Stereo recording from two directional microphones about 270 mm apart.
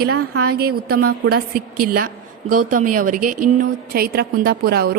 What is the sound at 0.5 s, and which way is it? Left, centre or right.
A woman's voice, right.